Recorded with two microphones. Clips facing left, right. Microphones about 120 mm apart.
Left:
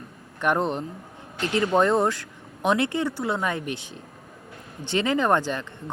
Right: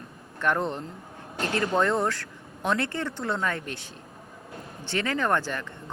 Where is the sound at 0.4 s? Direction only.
20° left (ahead or behind).